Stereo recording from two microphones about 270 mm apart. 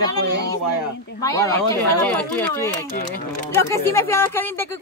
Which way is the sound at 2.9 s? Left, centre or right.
Left.